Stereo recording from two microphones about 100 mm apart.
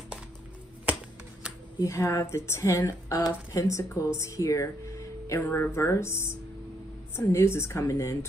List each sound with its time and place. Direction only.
1.8 s a woman's voice: 35° left (ahead or behind)